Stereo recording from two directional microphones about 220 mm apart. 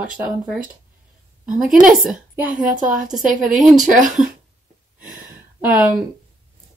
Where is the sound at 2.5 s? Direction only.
40° right (ahead or behind).